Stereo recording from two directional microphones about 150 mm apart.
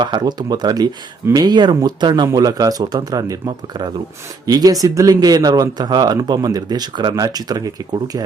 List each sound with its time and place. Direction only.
0.0 s speech: 30° right (ahead or behind)